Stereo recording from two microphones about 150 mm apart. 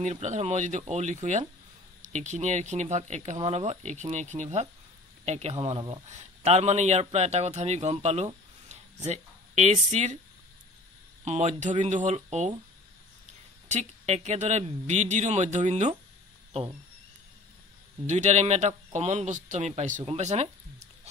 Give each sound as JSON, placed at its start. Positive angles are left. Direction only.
{"t": 0.0, "sound": "a man's voice", "side_deg": -50}
{"t": 6.0, "sound": "a man's voice", "side_deg": -45}
{"t": 11.2, "sound": "a man's voice", "side_deg": -50}
{"t": 13.7, "sound": "a man's voice", "side_deg": -50}
{"t": 18.0, "sound": "a man's voice", "side_deg": -50}